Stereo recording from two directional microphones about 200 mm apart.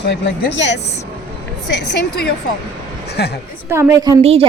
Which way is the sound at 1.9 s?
55° left (ahead or behind).